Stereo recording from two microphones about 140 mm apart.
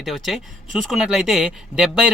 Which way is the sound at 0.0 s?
Centre (ahead or behind).